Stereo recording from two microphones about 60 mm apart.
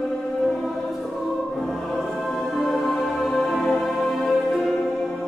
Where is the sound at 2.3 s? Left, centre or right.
Centre.